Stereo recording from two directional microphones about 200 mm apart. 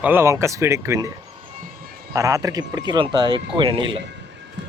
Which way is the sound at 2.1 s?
15° right (ahead or behind).